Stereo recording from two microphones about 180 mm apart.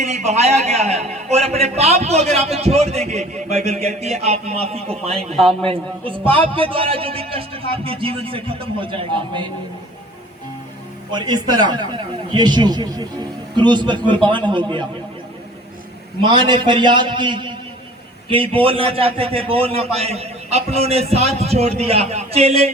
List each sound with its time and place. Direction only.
0.0 s a man's voice: 40° right (ahead or behind)
11.1 s a man's voice: 25° right (ahead or behind)
16.2 s a man's voice: 25° right (ahead or behind)